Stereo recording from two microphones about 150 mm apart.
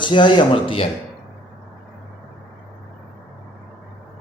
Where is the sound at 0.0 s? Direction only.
30° left (ahead or behind).